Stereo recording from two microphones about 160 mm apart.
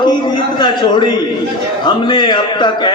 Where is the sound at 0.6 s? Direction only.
25° left (ahead or behind).